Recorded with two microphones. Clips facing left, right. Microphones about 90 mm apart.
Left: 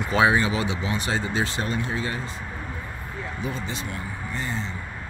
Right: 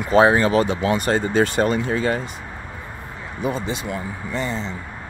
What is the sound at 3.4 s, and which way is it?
Speech, 70° right (ahead or behind).